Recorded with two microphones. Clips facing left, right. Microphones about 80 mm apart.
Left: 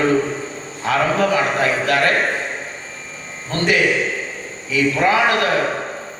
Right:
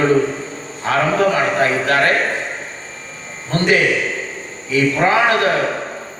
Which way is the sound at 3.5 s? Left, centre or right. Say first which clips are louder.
Right 3 dB; right.